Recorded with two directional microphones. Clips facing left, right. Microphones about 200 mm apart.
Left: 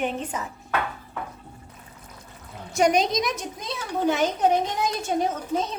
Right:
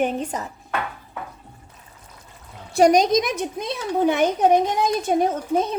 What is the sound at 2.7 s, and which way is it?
Speech, 40° right (ahead or behind).